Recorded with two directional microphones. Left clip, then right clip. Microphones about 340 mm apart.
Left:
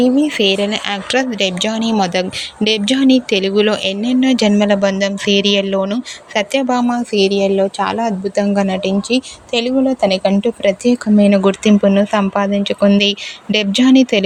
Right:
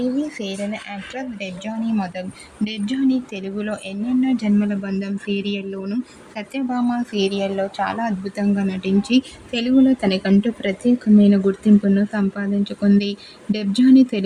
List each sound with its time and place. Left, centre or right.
0.0 s speech: left